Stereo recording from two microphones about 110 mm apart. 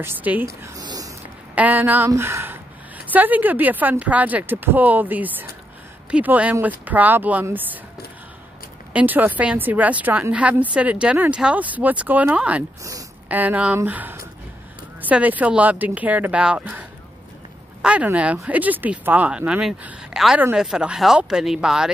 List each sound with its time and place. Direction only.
0.0 s speech: 15° right (ahead or behind)
0.7 s a sound: 35° right (ahead or behind)
1.5 s speech: 15° right (ahead or behind)
2.0 s speech: 25° right (ahead or behind)
8.9 s speech: 15° right (ahead or behind)
17.8 s speech: 10° right (ahead or behind)